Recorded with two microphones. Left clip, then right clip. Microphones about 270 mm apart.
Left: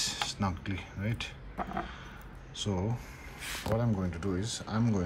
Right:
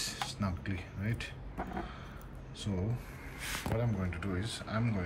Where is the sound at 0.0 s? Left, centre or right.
Centre.